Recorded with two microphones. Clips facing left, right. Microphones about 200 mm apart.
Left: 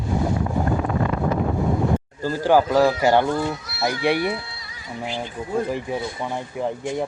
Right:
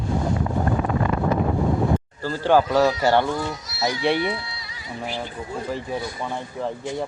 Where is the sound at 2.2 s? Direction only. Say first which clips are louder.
Left 1 dB; 10° left (ahead or behind).